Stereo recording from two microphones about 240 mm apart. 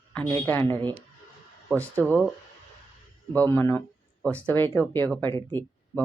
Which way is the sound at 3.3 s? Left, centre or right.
Centre.